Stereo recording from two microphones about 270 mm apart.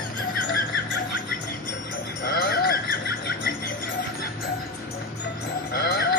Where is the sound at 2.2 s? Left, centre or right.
Left.